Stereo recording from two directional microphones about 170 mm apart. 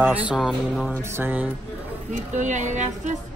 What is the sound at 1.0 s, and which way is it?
Speech, 15° right (ahead or behind).